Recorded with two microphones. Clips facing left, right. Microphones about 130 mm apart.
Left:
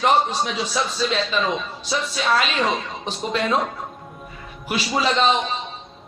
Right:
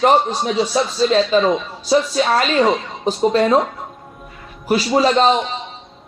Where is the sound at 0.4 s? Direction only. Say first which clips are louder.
Right 7 dB; 40° right (ahead or behind).